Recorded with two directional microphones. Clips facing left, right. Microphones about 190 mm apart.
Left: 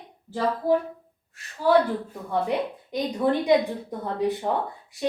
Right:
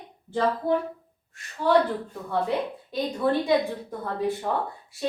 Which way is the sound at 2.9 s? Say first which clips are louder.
Left 1 dB; 20° left (ahead or behind).